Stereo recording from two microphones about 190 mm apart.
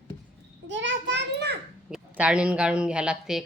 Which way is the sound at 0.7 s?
70° right (ahead or behind).